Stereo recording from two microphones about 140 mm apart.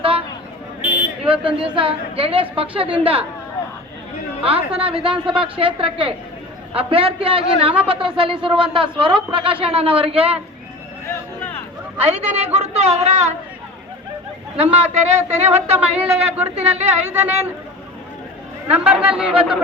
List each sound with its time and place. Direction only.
0.0 s a sound: 40° right (ahead or behind)
1.7 s a woman's voice: 40° right (ahead or behind)
4.4 s a woman's voice: 45° right (ahead or behind)
5.1 s speech: 5° right (ahead or behind)
5.4 s speech: 40° right (ahead or behind)
11.9 s a woman's voice: 50° right (ahead or behind)
14.5 s a woman's voice: 45° right (ahead or behind)
17.1 s a man's voice: 15° right (ahead or behind)
18.7 s a man's voice: 10° right (ahead or behind)